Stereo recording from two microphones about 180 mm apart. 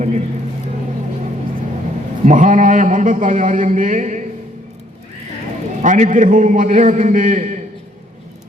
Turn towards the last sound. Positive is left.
turn(degrees=-45)  # may be behind; listen again after turning